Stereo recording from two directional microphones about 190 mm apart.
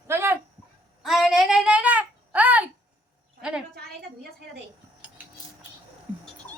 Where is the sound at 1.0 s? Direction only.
Centre (ahead or behind).